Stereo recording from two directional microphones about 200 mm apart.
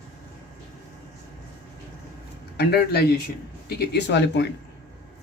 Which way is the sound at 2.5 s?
55° left (ahead or behind).